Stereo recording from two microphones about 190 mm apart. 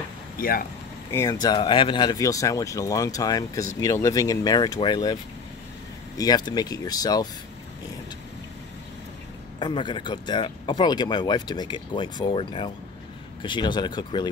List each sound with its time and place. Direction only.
0.4 s speech: 50° left (ahead or behind)
1.1 s speech: 20° left (ahead or behind)
6.1 s speech: 20° left (ahead or behind)
9.6 s speech: 25° left (ahead or behind)